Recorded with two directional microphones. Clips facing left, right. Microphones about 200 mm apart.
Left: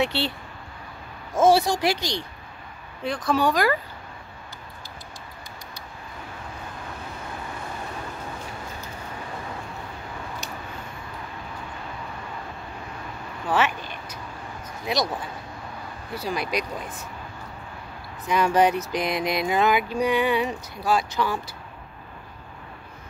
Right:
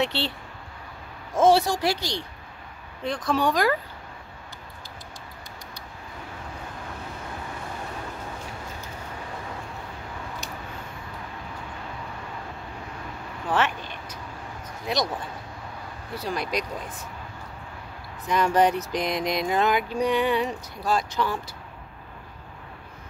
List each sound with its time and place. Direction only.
0.0 s speech: 10° left (ahead or behind)
1.3 s speech: 10° left (ahead or behind)
3.0 s a sound: 5° left (ahead or behind)
13.5 s vehicle: 5° left (ahead or behind)
16.3 s speech: 5° left (ahead or behind)
18.3 s a sound: 5° left (ahead or behind)